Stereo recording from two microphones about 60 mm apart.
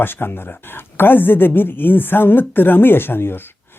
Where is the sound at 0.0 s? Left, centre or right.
Left.